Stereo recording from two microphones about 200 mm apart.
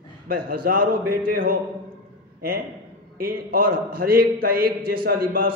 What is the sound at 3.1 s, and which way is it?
A man's voice, 50° right (ahead or behind).